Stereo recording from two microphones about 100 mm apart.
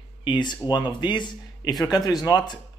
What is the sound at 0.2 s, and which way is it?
A man's voice, 50° left (ahead or behind).